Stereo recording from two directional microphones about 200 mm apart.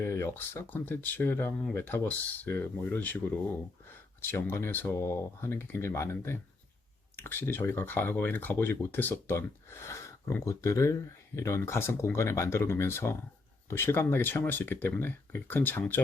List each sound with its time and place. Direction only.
0.0 s speech: 10° left (ahead or behind)